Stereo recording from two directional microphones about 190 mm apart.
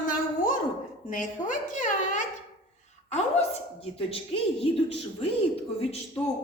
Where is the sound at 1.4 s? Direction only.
45° left (ahead or behind).